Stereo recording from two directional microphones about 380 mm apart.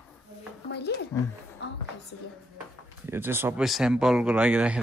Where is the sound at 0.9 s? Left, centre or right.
Left.